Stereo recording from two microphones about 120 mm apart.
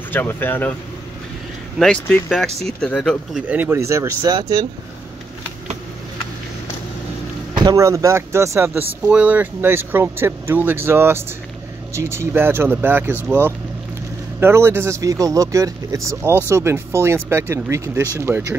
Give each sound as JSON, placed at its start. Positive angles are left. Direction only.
{"t": 0.1, "sound": "speech", "side_deg": 15}
{"t": 2.2, "sound": "speech", "side_deg": 0}
{"t": 3.4, "sound": "speech", "side_deg": -15}
{"t": 7.5, "sound": "speech", "side_deg": -30}